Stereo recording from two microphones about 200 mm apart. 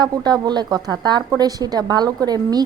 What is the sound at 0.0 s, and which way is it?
A woman's voice, 20° right (ahead or behind).